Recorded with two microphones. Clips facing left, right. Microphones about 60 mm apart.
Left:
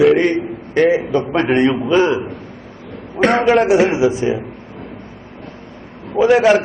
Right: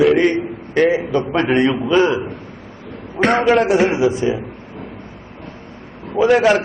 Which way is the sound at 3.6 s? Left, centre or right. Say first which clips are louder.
Left 2 dB; left.